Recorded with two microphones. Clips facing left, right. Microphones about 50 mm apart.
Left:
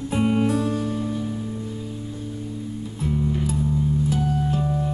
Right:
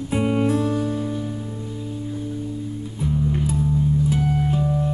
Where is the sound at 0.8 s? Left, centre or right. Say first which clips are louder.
Right 1 dB; centre.